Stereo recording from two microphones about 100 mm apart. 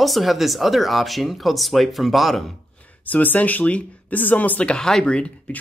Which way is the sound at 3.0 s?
15° left (ahead or behind).